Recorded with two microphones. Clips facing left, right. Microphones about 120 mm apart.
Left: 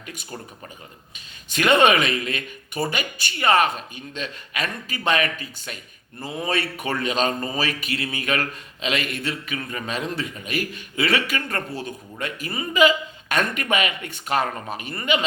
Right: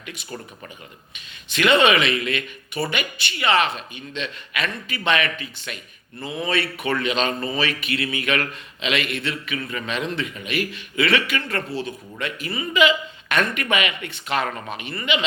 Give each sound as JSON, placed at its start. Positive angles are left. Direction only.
{"t": 0.0, "sound": "speech", "side_deg": 45}
{"t": 1.5, "sound": "speech", "side_deg": 45}